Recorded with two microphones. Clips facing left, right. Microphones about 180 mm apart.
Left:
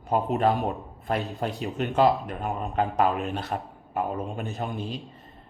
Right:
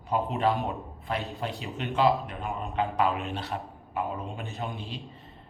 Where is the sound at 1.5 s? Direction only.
Centre (ahead or behind).